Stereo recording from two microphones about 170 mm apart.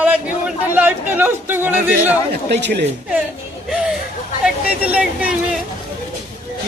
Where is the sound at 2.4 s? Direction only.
85° right.